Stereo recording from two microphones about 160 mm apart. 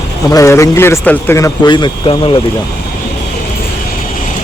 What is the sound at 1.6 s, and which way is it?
Speech, 30° left (ahead or behind).